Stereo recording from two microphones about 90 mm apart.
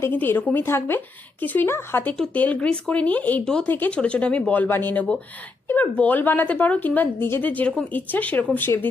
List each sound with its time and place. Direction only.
0.1 s a woman's voice: 20° left (ahead or behind)
3.4 s speech: 10° left (ahead or behind)
3.7 s a woman's voice: 20° left (ahead or behind)